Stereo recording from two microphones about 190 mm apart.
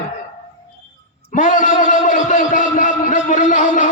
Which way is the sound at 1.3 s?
40° left (ahead or behind).